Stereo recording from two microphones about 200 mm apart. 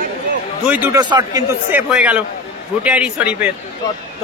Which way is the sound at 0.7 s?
10° right (ahead or behind).